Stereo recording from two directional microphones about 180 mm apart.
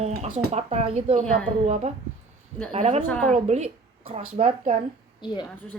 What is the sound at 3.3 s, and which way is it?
Speech, 35° right (ahead or behind).